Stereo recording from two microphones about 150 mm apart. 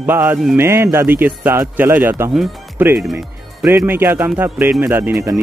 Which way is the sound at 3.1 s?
15° right (ahead or behind).